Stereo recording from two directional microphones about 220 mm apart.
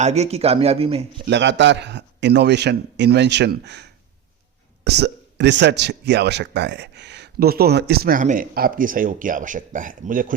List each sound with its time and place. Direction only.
0.0 s speech: 30° right (ahead or behind)
1.3 s speech: 55° right (ahead or behind); by 10.3 s 40° right (ahead or behind)